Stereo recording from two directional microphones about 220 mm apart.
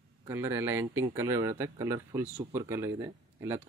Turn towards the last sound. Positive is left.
turn(degrees=-10)  # may be behind; listen again after turning